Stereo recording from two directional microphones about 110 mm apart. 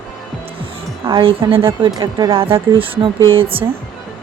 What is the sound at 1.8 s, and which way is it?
Speech, 40° right (ahead or behind).